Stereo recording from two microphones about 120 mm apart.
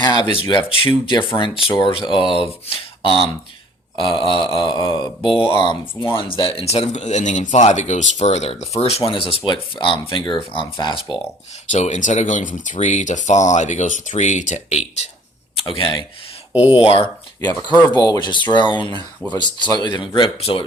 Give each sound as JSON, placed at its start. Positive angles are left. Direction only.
{"t": 0.0, "sound": "speech", "side_deg": 40}
{"t": 3.9, "sound": "a sound", "side_deg": 45}
{"t": 4.3, "sound": "speech", "side_deg": 50}
{"t": 11.7, "sound": "speech", "side_deg": 80}
{"t": 15.8, "sound": "speech", "side_deg": 40}
{"t": 17.7, "sound": "speech", "side_deg": 35}